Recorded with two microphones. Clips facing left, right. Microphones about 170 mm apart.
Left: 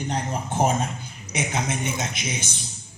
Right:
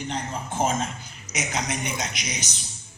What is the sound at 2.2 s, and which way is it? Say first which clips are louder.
Speech: left 3 dB; 25° left (ahead or behind).